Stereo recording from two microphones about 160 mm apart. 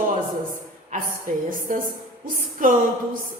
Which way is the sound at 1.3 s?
50° right (ahead or behind).